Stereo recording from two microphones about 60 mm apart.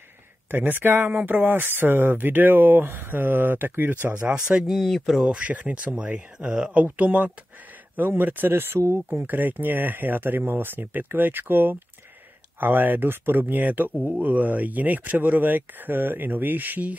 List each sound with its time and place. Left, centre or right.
0.5 s speech: right
4.5 s speech: centre
4.7 s speech: centre
5.4 s speech: right